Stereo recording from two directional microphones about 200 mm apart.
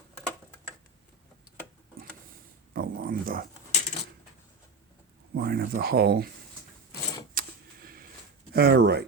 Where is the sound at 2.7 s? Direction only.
45° right (ahead or behind).